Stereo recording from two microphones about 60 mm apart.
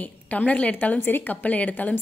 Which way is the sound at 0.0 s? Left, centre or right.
Left.